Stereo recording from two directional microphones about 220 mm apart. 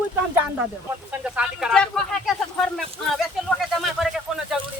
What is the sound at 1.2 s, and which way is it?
Speech, 5° right (ahead or behind).